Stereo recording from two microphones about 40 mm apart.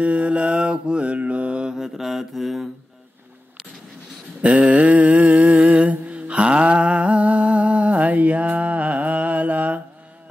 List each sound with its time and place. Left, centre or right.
0.0 s mantra: right
1.7 s mantra: centre
4.4 s a sound: right